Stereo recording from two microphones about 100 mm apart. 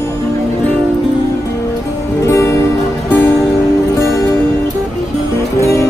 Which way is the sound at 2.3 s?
30° left (ahead or behind).